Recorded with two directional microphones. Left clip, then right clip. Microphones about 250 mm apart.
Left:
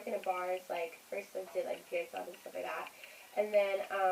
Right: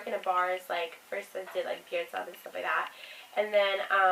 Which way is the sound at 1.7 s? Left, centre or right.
Right.